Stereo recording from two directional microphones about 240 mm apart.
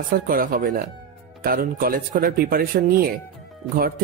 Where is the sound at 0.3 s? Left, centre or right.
Right.